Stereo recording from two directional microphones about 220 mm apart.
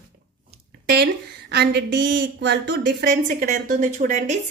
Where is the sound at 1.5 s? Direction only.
50° right (ahead or behind).